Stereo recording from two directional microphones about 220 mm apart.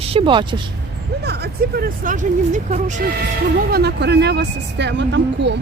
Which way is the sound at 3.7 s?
50° right (ahead or behind).